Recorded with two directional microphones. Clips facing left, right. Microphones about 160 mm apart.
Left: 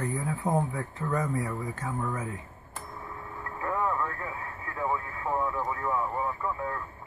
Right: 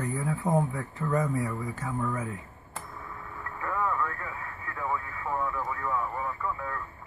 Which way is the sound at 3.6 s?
20° left (ahead or behind).